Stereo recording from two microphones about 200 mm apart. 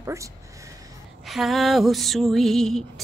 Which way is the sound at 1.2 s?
Centre (ahead or behind).